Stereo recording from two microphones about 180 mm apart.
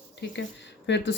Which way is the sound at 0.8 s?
80° left.